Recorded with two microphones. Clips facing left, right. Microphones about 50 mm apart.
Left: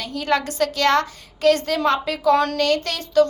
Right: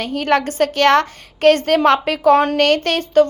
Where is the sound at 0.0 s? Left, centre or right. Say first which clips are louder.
Right 5 dB; right.